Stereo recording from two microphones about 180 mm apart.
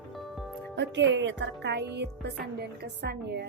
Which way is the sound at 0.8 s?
80° right.